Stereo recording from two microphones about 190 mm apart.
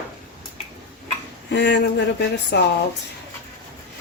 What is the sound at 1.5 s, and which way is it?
Speech, 65° left (ahead or behind).